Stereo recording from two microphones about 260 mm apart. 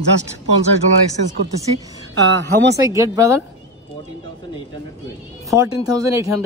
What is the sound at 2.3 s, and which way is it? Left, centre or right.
Speech, right.